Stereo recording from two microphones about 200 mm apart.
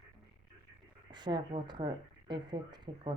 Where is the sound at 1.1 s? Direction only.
20° right (ahead or behind).